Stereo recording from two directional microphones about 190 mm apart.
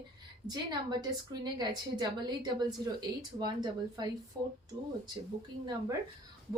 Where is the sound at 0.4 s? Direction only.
20° right (ahead or behind).